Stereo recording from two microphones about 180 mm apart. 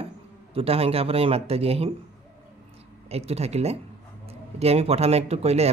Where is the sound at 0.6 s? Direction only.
35° right (ahead or behind).